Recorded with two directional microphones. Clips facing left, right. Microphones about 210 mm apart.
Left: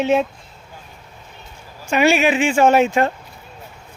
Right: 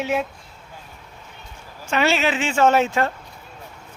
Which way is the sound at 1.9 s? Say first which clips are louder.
Left 5 dB; 15° left (ahead or behind).